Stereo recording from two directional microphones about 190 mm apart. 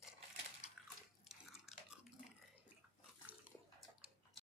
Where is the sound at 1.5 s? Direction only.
5° right (ahead or behind).